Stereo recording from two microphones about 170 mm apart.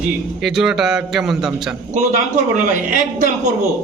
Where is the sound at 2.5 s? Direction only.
50° right (ahead or behind).